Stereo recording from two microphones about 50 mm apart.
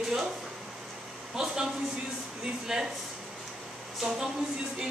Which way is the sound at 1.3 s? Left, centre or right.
Centre.